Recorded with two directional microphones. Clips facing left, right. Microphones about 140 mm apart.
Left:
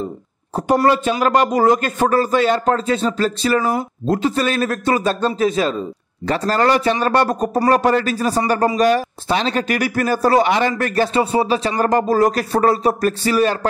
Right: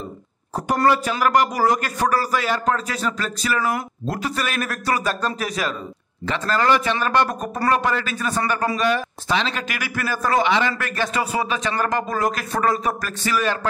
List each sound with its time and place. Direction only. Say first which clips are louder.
0.8 s a man's voice: left 3 dB; 25° left (ahead or behind)
6.2 s speech: left 4 dB; 40° left (ahead or behind)